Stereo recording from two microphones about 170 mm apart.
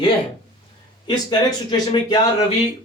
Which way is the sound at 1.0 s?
25° left (ahead or behind).